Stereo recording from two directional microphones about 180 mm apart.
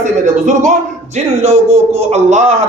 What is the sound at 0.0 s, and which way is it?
A man's voice, 40° right (ahead or behind).